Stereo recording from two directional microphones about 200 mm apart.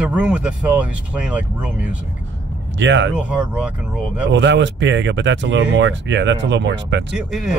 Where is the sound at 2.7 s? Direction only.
65° right (ahead or behind).